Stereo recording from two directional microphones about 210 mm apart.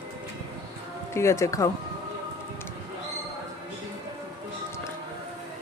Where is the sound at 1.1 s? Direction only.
15° left (ahead or behind).